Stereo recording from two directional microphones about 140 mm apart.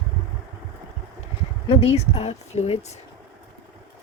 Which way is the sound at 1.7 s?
45° left (ahead or behind).